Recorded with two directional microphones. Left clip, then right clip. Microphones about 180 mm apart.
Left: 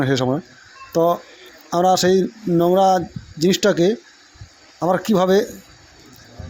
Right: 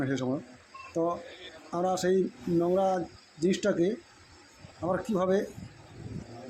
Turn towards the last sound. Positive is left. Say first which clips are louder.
# left 11 dB
turn(degrees=50)  # may be behind; listen again after turning